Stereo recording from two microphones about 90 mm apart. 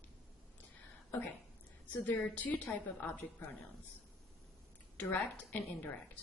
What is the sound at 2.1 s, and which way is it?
A woman's voice, 20° left (ahead or behind).